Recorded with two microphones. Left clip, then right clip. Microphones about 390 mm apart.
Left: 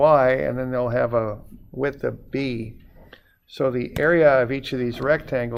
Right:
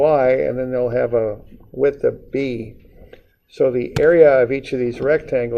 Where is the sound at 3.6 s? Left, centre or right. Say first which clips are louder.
Right 5 dB; left.